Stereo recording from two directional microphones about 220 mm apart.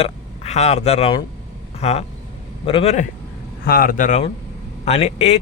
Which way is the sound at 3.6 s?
40° left (ahead or behind).